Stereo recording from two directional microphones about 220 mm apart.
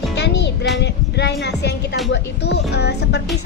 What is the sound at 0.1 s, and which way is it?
Music, 50° left (ahead or behind).